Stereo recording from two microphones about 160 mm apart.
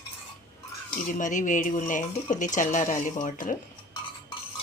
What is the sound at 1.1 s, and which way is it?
Speech, 50° left (ahead or behind).